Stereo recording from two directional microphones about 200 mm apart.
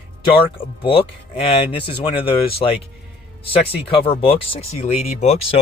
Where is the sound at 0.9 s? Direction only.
30° left (ahead or behind).